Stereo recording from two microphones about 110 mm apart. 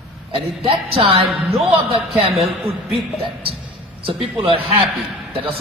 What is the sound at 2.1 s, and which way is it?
Speech, centre (ahead or behind).